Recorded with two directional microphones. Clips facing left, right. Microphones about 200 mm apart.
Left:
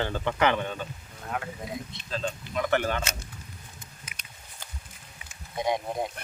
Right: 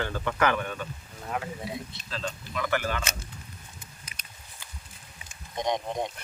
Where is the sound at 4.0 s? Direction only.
35° right (ahead or behind).